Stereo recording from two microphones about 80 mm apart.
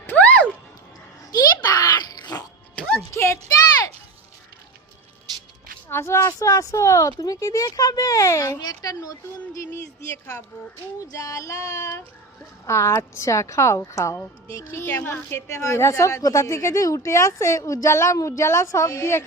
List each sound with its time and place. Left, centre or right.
0.0 s a sound: left
1.3 s music: left
2.7 s music: centre
3.1 s a sound: left
5.9 s speech: left
8.6 s speech: left
11.1 s a woman's voice: left
14.8 s a woman's voice: left